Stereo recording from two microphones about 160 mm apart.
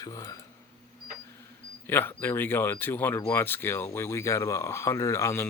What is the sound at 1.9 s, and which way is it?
Speech, 15° left (ahead or behind).